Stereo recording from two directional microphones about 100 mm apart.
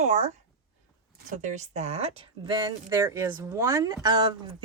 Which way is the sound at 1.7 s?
90° right.